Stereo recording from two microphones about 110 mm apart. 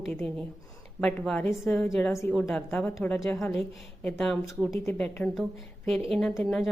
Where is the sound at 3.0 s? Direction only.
10° left (ahead or behind).